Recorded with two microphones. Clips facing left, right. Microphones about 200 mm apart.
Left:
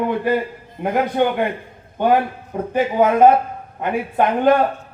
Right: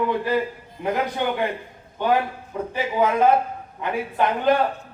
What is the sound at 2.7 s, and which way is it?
Speech, 50° left (ahead or behind).